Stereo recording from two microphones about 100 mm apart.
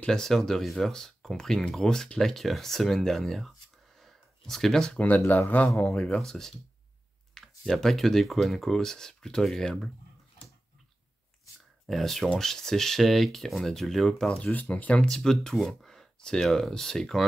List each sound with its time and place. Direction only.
0.0 s speech: 5° left (ahead or behind)
4.0 s a sound: centre (ahead or behind)
5.0 s speech: 20° left (ahead or behind)
5.9 s speech: 5° left (ahead or behind)
11.8 s speech: centre (ahead or behind)
14.5 s speech: 15° left (ahead or behind)